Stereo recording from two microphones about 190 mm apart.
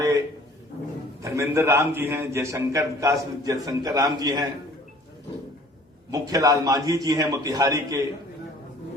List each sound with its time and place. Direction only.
1.2 s a man's voice: 15° right (ahead or behind)
6.1 s a man's voice: 20° right (ahead or behind)